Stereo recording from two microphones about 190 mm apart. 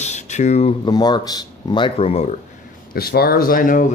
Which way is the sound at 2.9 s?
55° left (ahead or behind).